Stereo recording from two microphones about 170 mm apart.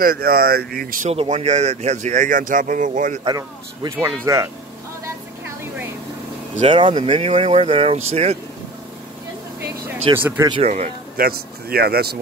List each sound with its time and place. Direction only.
0.0 s speech: 60° right (ahead or behind)
1.1 s speech: 40° right (ahead or behind)
3.3 s speech: 20° right (ahead or behind)
6.7 s speech: 30° right (ahead or behind)
10.1 s speech: 15° right (ahead or behind)
11.1 s speech: 65° right (ahead or behind)